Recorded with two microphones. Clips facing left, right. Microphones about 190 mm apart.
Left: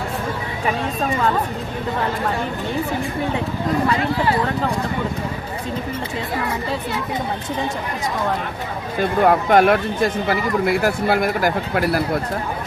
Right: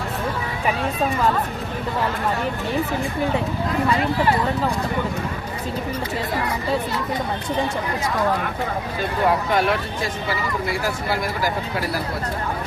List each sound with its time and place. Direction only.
9.2 s speech: 55° left (ahead or behind)